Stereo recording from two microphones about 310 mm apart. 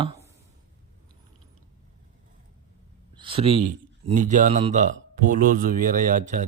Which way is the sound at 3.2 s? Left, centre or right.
Centre.